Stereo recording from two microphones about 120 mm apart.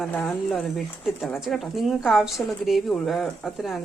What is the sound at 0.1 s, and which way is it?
Speech, 20° left (ahead or behind).